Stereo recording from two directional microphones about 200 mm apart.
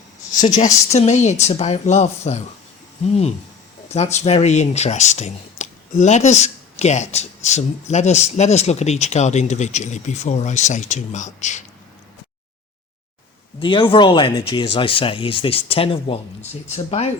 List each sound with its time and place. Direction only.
0.9 s speech: 35° left (ahead or behind)
3.9 s speech: 35° left (ahead or behind)
13.6 s speech: 25° left (ahead or behind)